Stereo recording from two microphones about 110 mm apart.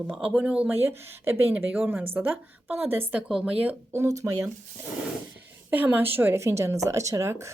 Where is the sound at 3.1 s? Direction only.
10° right (ahead or behind).